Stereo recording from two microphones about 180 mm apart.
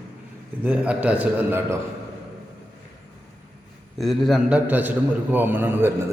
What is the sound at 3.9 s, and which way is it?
A man's voice, centre (ahead or behind).